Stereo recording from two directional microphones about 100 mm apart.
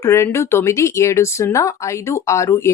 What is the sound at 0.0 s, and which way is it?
Speech, 25° left (ahead or behind).